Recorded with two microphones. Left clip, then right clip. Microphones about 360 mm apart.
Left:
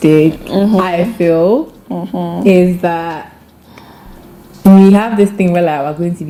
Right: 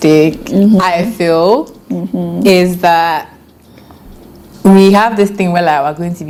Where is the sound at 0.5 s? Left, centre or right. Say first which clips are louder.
Right 1 dB; left.